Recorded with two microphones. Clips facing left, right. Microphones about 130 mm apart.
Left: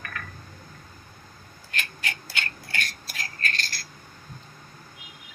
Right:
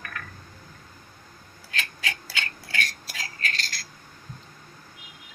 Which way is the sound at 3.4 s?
90° right.